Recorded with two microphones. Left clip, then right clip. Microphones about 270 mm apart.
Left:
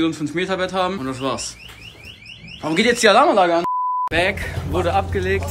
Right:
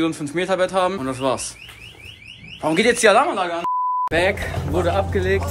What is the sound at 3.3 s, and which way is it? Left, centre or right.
Speech, left.